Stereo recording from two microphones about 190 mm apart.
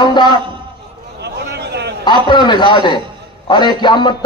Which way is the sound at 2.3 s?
25° left (ahead or behind).